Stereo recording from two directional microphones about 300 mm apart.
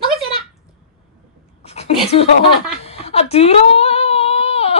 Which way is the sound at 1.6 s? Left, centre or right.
Left.